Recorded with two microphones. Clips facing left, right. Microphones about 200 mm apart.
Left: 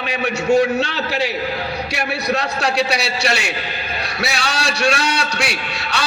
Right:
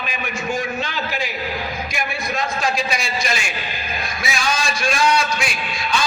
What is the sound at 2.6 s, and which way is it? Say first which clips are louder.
A man's voice: left 4 dB; 70° left (ahead or behind).